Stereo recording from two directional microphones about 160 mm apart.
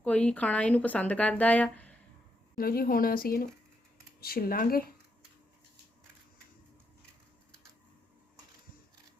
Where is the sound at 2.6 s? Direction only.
65° left (ahead or behind).